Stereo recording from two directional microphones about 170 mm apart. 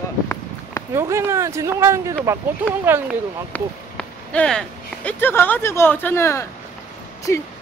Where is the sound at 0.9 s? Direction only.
15° right (ahead or behind).